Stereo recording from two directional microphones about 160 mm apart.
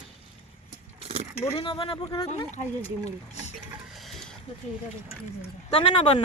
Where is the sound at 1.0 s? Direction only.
40° right (ahead or behind).